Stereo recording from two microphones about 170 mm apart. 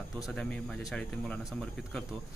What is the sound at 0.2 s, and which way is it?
Speech, 5° left (ahead or behind).